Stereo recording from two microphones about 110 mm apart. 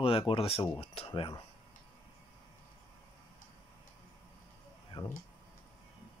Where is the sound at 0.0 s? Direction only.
55° left (ahead or behind).